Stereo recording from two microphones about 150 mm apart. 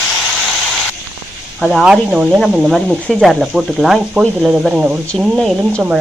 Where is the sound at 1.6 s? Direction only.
5° left (ahead or behind).